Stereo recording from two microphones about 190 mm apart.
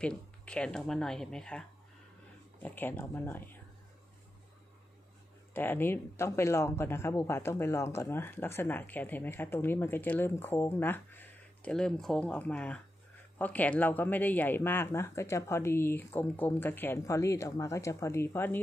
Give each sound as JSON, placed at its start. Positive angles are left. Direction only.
{"t": 0.0, "sound": "speech", "side_deg": 5}
{"t": 5.5, "sound": "speech", "side_deg": 10}